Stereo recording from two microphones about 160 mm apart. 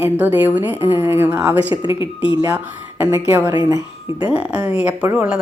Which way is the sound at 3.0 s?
15° right (ahead or behind).